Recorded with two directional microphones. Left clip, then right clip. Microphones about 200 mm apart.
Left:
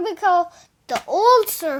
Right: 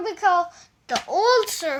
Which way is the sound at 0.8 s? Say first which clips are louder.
Left 4 dB; 55° left (ahead or behind).